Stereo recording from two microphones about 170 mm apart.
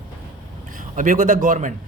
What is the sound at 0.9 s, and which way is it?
Speech, 50° right (ahead or behind).